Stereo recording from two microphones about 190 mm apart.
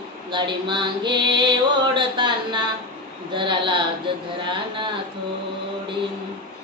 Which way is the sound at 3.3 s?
25° right (ahead or behind).